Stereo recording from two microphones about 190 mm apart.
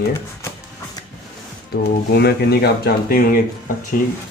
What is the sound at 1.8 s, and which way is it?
Speech, 60° left (ahead or behind).